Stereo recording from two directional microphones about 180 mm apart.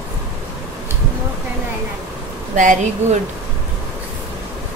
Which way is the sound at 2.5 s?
45° right (ahead or behind).